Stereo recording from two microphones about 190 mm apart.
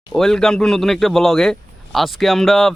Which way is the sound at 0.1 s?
Centre (ahead or behind).